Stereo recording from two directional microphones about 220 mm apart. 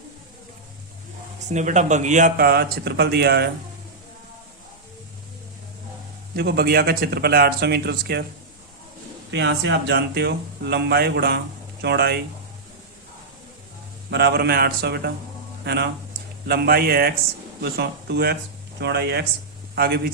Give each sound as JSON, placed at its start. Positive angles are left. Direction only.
{"t": 1.5, "sound": "speech", "side_deg": -35}
{"t": 6.3, "sound": "speech", "side_deg": -45}
{"t": 9.3, "sound": "speech", "side_deg": -50}
{"t": 14.1, "sound": "speech", "side_deg": -50}